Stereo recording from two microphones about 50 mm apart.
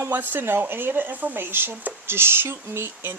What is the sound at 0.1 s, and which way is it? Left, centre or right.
Speech, right.